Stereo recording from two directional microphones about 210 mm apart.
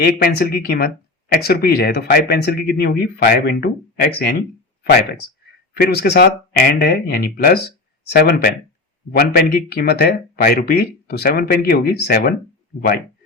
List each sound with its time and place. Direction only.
0.0 s speech: 50° left (ahead or behind)